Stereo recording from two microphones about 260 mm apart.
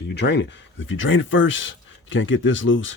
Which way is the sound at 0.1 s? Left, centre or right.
Left.